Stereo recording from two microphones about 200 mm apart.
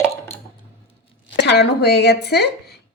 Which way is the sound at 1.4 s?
60° left (ahead or behind).